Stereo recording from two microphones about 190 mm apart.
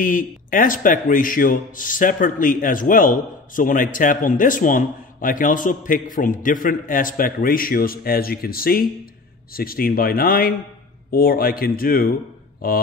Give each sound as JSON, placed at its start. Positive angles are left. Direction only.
{"t": 0.0, "sound": "a man's voice", "side_deg": 45}